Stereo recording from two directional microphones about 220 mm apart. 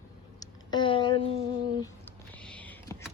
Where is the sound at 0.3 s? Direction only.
20° left (ahead or behind).